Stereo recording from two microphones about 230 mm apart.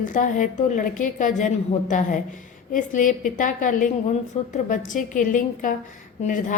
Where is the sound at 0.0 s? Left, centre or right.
Left.